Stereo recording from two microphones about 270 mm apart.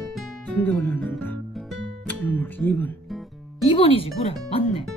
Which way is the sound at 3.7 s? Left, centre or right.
Left.